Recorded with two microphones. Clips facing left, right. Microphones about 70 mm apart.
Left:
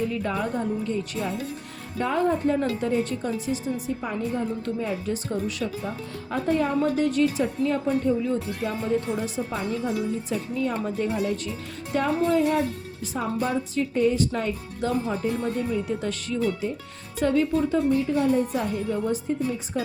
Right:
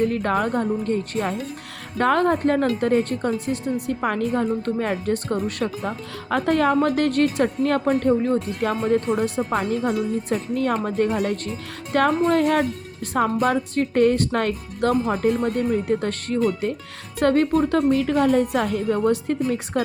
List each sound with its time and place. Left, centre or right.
0.0 s speech: right
2.0 s speech: right
2.8 s speech: right
3.8 s speech: right
4.6 s speech: right
6.3 s a woman's voice: right
9.8 s speech: right
17.9 s a woman's voice: right